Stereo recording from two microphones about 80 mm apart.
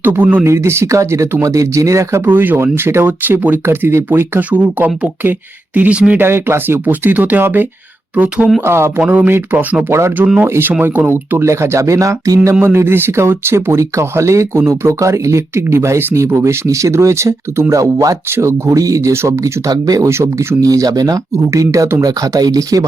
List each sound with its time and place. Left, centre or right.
0.0 s speech: right
0.4 s speech: right
2.2 s speech: right
6.2 s speech: right
8.6 s speech: right
9.0 s speech: centre; by 12.5 s right
12.6 s speech: right
19.6 s speech: right
20.1 s speech: right